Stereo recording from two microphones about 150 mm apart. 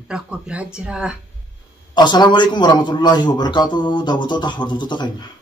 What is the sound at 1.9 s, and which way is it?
A man's voice, 30° left (ahead or behind).